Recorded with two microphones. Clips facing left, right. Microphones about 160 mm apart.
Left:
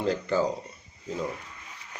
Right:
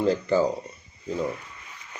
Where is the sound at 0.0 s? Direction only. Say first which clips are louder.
Right 4 dB; 5° right (ahead or behind).